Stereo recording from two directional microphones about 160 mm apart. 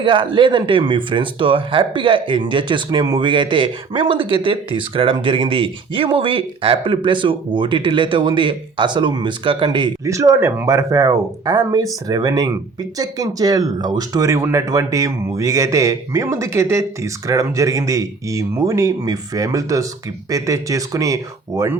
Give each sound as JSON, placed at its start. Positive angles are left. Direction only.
{"t": 0.0, "sound": "speech", "side_deg": -30}